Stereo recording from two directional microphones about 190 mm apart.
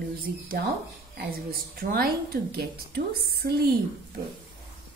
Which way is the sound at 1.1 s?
55° right (ahead or behind).